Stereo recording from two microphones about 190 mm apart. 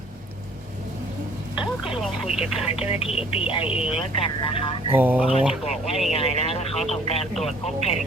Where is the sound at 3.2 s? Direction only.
30° left (ahead or behind).